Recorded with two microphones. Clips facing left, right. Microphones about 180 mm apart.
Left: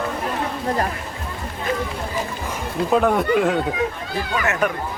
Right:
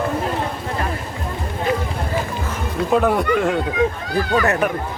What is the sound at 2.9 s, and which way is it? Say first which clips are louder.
Speech: even; centre (ahead or behind).